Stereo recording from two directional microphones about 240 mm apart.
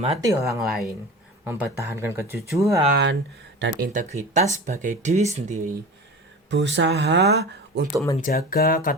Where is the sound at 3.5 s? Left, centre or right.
Right.